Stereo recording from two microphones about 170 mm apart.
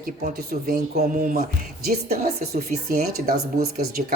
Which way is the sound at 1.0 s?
50° right (ahead or behind).